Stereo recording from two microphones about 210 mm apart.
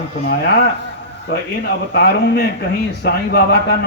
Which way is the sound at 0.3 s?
50° left (ahead or behind).